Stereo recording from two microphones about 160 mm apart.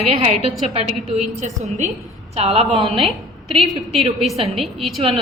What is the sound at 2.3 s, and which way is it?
Speech, 40° right (ahead or behind).